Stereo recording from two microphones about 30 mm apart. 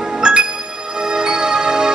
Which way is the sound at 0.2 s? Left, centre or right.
Right.